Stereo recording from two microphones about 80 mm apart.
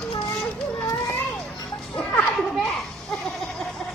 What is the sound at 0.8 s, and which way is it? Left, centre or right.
Children playing, left.